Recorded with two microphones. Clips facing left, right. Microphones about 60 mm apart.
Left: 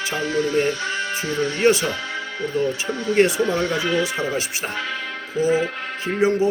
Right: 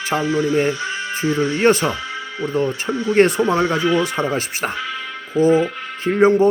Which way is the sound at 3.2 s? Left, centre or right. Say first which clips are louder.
Right 3 dB; right.